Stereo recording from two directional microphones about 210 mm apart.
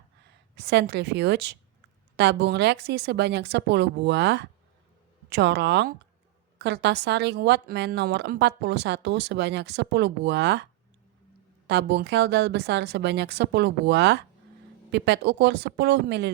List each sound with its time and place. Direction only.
0.5 s a woman's voice: 55° right (ahead or behind)
11.7 s a woman's voice: 55° right (ahead or behind)